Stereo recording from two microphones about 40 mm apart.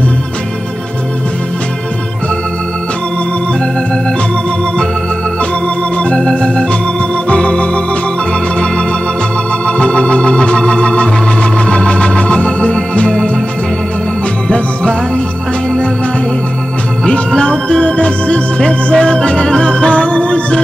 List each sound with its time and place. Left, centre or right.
6.1 s organ: centre
7.2 s organ: left
9.7 s organ: left
14.5 s music: left
17.4 s organ: left
18.9 s music: left